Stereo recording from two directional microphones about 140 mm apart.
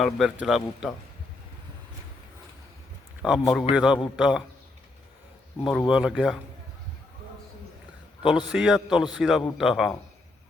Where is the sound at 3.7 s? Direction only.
5° right (ahead or behind).